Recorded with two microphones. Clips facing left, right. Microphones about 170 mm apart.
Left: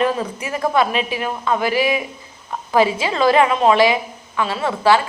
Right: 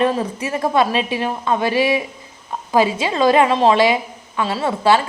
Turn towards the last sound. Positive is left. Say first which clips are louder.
# even
turn(degrees=-25)  # may be behind; listen again after turning